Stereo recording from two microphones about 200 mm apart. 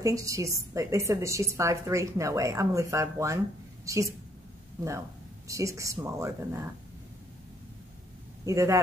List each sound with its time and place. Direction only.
0.0 s a woman's voice: 15° right (ahead or behind)
5.5 s a woman's voice: 15° right (ahead or behind)
8.5 s a woman's voice: 15° right (ahead or behind)